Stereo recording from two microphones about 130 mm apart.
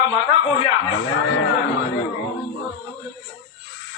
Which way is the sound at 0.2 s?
40° left (ahead or behind).